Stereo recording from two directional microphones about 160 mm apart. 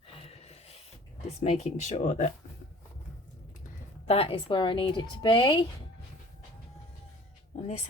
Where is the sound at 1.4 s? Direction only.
40° left (ahead or behind).